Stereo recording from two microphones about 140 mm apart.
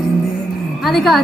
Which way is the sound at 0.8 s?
Centre (ahead or behind).